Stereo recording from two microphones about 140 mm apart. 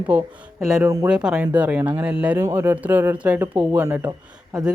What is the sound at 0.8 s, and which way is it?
Speech, 25° right (ahead or behind).